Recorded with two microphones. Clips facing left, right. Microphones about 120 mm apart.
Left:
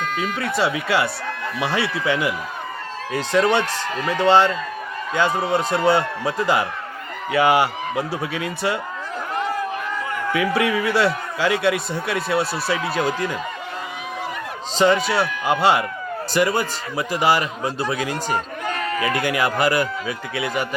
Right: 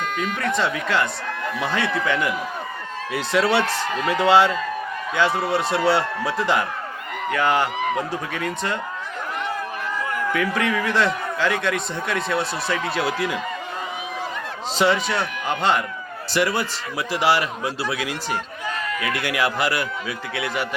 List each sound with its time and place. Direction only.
0.2 s speech: 10° left (ahead or behind)
3.3 s a man's voice: 5° right (ahead or behind)
10.3 s a man's voice: 10° left (ahead or behind)
15.4 s a man's voice: 10° left (ahead or behind)
18.3 s a sound: 55° left (ahead or behind)
19.2 s a man's voice: centre (ahead or behind)